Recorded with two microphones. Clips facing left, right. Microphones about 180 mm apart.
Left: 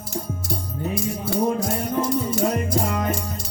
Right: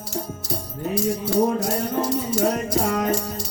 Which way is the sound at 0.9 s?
50° left (ahead or behind).